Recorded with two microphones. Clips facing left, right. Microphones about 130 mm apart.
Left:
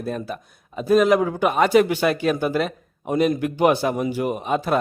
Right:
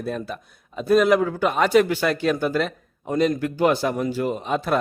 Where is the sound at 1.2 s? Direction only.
15° left (ahead or behind).